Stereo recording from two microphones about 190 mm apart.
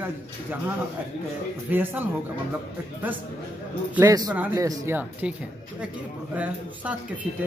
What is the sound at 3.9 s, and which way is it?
A man's voice, 15° right (ahead or behind).